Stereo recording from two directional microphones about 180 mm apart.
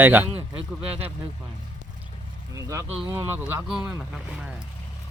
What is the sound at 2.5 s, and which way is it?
Speech, 15° right (ahead or behind).